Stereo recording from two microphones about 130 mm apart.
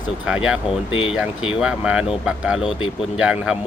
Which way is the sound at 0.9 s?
40° left (ahead or behind).